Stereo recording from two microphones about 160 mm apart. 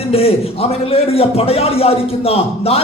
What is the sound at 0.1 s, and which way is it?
A man's voice, 40° left (ahead or behind).